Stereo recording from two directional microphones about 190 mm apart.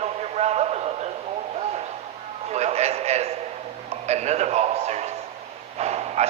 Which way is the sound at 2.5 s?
35° right (ahead or behind).